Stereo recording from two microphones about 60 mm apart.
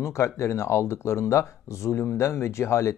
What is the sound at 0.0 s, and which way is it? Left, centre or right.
Speech, left.